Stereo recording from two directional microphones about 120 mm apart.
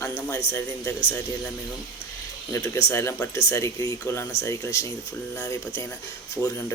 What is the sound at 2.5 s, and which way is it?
Speech, 20° left (ahead or behind).